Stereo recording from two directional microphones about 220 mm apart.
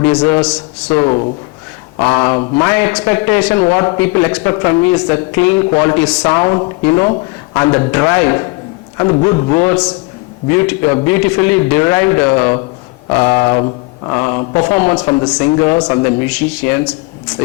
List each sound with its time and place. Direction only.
0.0 s a man's voice: 10° left (ahead or behind)